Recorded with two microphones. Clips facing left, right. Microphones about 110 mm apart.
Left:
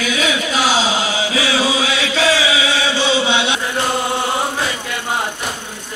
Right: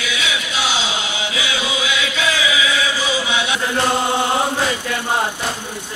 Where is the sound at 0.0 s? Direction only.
40° left (ahead or behind).